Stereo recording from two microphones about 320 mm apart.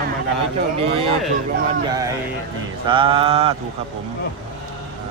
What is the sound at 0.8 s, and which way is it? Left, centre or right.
Speech, centre.